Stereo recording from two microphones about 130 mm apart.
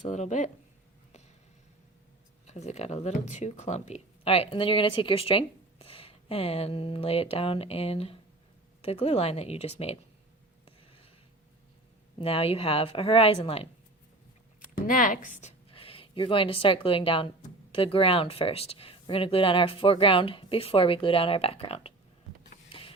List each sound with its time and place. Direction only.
0.0 s speech: 65° left (ahead or behind)
2.5 s speech: 60° left (ahead or behind)
10.7 s a sound: 45° left (ahead or behind)
12.2 s speech: 45° left (ahead or behind)
14.8 s speech: 90° left; by 15.5 s 75° left (ahead or behind)
15.7 s speech: 45° left (ahead or behind)
22.7 s printer: 45° left (ahead or behind)